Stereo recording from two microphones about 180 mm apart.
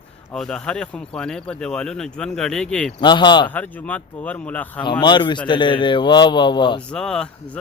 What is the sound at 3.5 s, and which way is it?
Speech, 10° left (ahead or behind).